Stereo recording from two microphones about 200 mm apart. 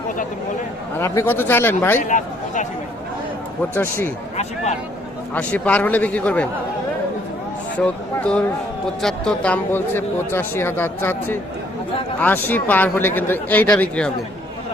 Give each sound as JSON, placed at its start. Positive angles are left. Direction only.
{"t": 0.9, "sound": "speech", "side_deg": 10}
{"t": 2.0, "sound": "speech", "side_deg": 40}
{"t": 3.8, "sound": "speech", "side_deg": 10}
{"t": 5.3, "sound": "speech", "side_deg": 5}
{"t": 7.8, "sound": "speech", "side_deg": 5}